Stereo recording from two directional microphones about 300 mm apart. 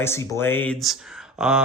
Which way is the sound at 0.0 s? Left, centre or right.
Centre.